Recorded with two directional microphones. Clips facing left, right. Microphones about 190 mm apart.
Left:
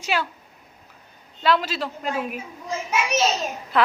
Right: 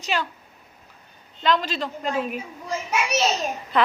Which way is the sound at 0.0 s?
10° left (ahead or behind).